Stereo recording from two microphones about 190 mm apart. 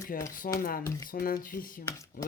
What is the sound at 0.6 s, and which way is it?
Speech, 50° left (ahead or behind).